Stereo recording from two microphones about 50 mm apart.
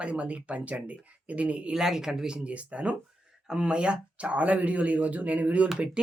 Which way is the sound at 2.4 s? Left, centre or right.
Right.